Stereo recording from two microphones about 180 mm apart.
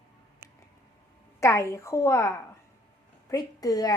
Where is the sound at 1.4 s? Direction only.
15° left (ahead or behind).